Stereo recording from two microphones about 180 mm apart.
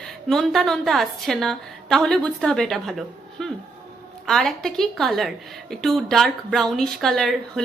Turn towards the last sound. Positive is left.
turn(degrees=0)  # may be behind; listen again after turning